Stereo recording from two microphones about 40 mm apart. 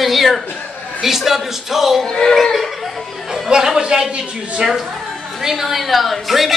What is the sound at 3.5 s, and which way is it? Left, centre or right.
A man's voice, centre.